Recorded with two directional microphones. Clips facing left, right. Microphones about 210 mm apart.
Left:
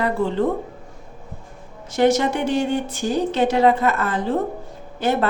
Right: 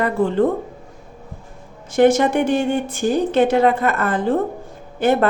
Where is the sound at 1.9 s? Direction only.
50° right (ahead or behind).